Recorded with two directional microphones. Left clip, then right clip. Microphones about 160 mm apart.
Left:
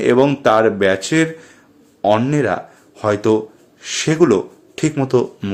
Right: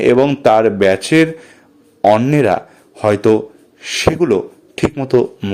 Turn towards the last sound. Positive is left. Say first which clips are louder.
# right 3 dB
turn(degrees=-20)  # may be behind; listen again after turning